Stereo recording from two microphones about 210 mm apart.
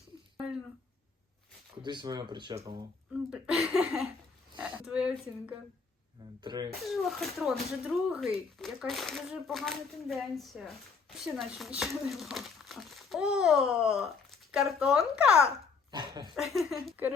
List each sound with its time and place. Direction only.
0.3 s a sound: 5° right (ahead or behind)
1.8 s speech: 20° right (ahead or behind)
3.2 s a child's voice: 5° right (ahead or behind)
6.4 s speech: 20° right (ahead or behind)
6.7 s a child's voice: centre (ahead or behind)
15.9 s speech: 20° right (ahead or behind)
16.3 s a child's voice: centre (ahead or behind)